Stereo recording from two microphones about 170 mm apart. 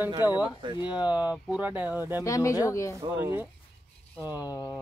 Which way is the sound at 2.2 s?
20° left (ahead or behind).